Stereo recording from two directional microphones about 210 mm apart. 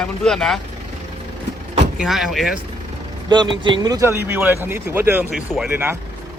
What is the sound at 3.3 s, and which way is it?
Speech, 20° right (ahead or behind).